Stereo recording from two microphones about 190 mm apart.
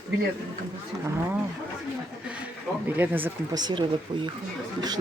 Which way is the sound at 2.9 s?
10° right (ahead or behind).